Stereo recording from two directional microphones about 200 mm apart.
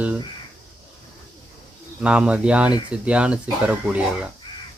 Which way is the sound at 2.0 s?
5° right (ahead or behind).